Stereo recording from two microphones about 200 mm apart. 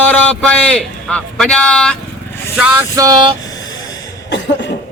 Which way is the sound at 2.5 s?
10° right (ahead or behind).